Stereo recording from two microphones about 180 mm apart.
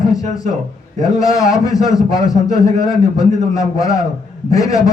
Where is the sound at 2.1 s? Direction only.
20° left (ahead or behind).